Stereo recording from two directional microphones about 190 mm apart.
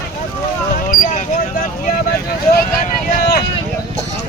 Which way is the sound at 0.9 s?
45° left (ahead or behind).